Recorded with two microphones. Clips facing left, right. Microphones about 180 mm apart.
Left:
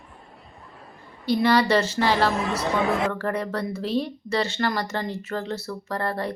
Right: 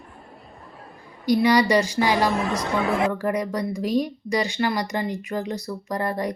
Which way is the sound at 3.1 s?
10° right (ahead or behind).